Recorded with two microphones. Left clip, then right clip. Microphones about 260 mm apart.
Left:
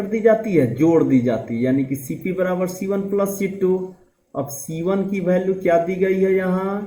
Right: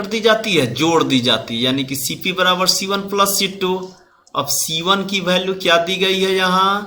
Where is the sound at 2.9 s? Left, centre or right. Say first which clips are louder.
Right 4 dB; right.